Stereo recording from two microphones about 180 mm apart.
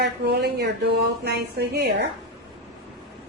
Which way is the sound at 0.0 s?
65° right (ahead or behind).